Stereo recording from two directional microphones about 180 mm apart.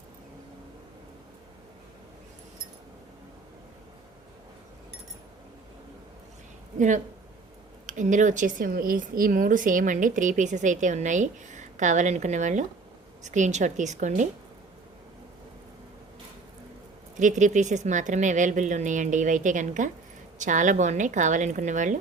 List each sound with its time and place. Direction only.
6.7 s a woman's voice: 45° right (ahead or behind)
17.2 s speech: 45° right (ahead or behind)